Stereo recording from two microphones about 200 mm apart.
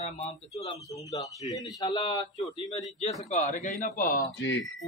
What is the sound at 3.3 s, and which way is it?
Speech, 35° left (ahead or behind).